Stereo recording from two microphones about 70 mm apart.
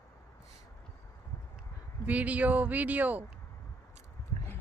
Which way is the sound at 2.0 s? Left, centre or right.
Right.